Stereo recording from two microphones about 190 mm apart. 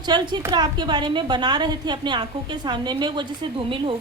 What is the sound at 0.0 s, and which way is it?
A woman's voice, 20° right (ahead or behind).